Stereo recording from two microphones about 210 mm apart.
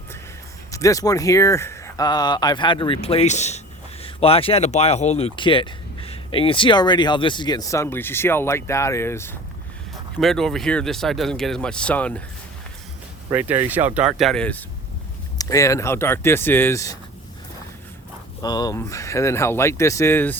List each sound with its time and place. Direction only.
0.7 s speech: 15° left (ahead or behind)
10.2 s speech: centre (ahead or behind)
13.3 s speech: 10° right (ahead or behind)
15.4 s speech: 15° left (ahead or behind)
18.4 s speech: 20° left (ahead or behind)